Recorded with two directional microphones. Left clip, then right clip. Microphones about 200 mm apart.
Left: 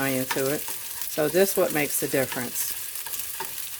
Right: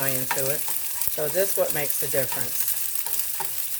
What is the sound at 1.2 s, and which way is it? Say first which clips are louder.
Speech: left 4 dB; 50° left (ahead or behind).